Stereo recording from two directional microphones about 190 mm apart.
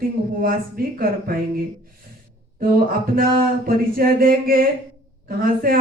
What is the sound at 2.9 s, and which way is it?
Speech, 50° right (ahead or behind).